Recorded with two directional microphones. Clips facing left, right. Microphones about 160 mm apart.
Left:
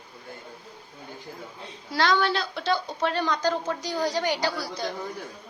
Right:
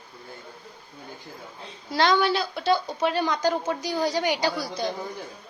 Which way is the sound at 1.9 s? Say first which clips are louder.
Right 2 dB; 20° right (ahead or behind).